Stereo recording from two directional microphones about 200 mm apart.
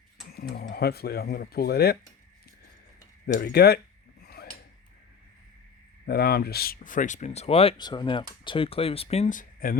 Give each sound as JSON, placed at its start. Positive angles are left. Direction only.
{"t": 0.3, "sound": "speech", "side_deg": 50}
{"t": 3.2, "sound": "speech", "side_deg": 55}
{"t": 4.2, "sound": "a sound", "side_deg": 50}
{"t": 6.1, "sound": "speech", "side_deg": 50}